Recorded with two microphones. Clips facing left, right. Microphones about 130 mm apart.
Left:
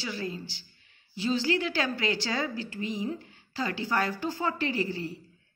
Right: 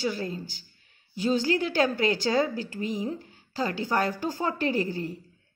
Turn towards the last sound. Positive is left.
turn(degrees=-45)  # may be behind; listen again after turning